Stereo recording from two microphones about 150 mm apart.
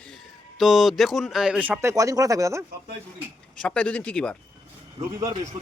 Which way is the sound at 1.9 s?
20° right (ahead or behind).